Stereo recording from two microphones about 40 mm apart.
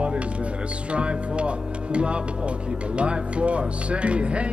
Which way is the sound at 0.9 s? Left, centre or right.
Right.